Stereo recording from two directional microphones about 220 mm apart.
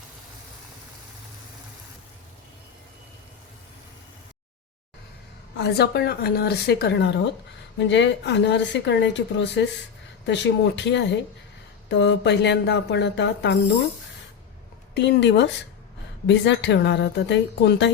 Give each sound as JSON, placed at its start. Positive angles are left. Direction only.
{"t": 5.5, "sound": "speech", "side_deg": 50}
{"t": 14.9, "sound": "speech", "side_deg": 50}